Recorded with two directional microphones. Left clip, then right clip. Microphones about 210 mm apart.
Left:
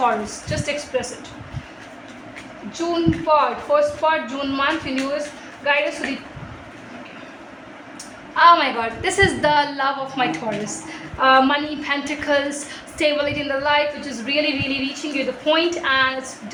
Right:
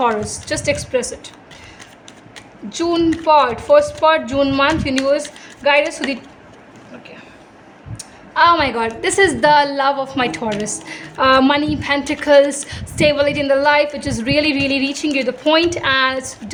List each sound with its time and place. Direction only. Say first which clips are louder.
0.0 s speech: right 2 dB; 55° right (ahead or behind)
2.7 s a woman's voice: right 4 dB; 55° right (ahead or behind)
8.4 s a woman's voice: right 1 dB; 50° right (ahead or behind)